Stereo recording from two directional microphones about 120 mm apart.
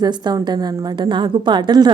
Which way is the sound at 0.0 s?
35° right (ahead or behind).